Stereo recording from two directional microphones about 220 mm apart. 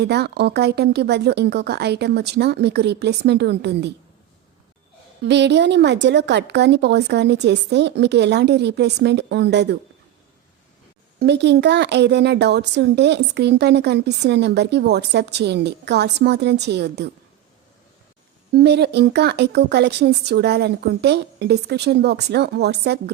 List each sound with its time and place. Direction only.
0.0 s speech: 50° right (ahead or behind)
5.2 s speech: 50° right (ahead or behind)
11.2 s speech: 50° right (ahead or behind)
18.5 s speech: 50° right (ahead or behind)